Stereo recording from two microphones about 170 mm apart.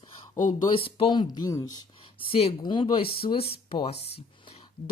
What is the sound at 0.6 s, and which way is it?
Speech, 30° left (ahead or behind).